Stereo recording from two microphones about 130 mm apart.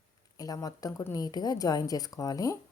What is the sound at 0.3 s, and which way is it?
A woman's voice, 30° left (ahead or behind).